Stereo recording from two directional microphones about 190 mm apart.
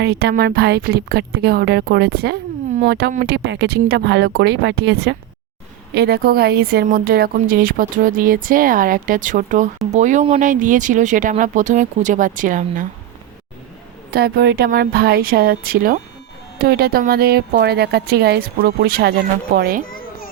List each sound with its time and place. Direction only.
0.0 s speech: 60° right (ahead or behind)
3.3 s speech: 60° right (ahead or behind); by 12.8 s 45° right (ahead or behind)
14.1 s speech: 55° right (ahead or behind)